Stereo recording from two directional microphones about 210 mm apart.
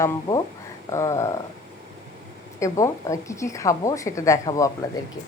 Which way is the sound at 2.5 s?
15° left (ahead or behind).